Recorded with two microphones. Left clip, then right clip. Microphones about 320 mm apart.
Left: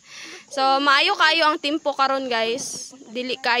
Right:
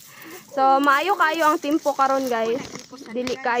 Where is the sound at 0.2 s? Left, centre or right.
Centre.